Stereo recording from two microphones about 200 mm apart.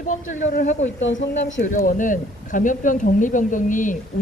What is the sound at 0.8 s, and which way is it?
Speech, 65° left (ahead or behind).